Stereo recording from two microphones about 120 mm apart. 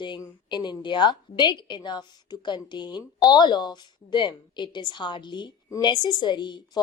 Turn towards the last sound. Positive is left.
turn(degrees=40)  # may be behind; listen again after turning